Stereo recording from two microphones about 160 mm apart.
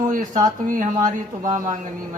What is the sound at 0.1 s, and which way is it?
Speech, 55° right (ahead or behind).